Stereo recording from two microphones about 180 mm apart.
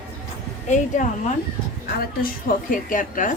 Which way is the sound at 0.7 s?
40° left (ahead or behind).